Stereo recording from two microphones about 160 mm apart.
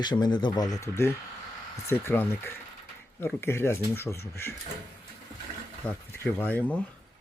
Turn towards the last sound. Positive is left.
turn(degrees=10)  # may be behind; listen again after turning